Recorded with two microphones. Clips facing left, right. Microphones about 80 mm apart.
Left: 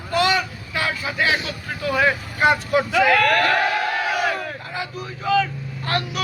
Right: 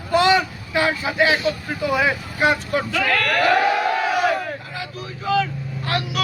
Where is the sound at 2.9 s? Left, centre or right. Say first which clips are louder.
Left 5 dB; centre.